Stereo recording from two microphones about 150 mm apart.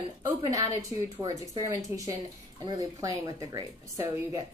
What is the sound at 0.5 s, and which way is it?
A woman's voice, 20° right (ahead or behind).